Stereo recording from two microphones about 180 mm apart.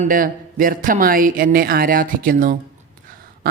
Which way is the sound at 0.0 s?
50° right (ahead or behind).